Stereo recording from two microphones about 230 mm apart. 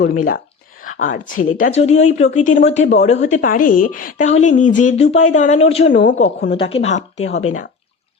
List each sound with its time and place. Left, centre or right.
0.1 s speech: left
0.8 s a sound: left
1.5 s speech: left